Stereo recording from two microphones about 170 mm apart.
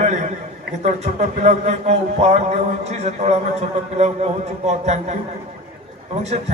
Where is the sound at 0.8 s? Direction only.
40° right (ahead or behind).